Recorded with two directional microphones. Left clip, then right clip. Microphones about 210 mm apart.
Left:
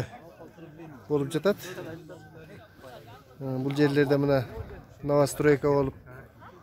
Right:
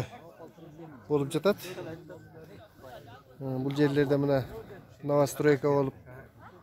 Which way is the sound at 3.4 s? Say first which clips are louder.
Left 2 dB; 5° left (ahead or behind).